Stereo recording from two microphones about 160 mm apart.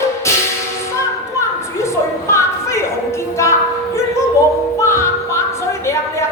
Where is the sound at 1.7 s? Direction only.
20° left (ahead or behind).